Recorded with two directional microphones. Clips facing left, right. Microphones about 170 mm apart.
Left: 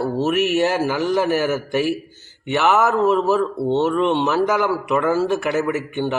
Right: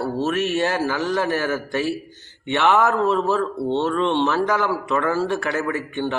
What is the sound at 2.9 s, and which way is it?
A man's voice, 15° left (ahead or behind).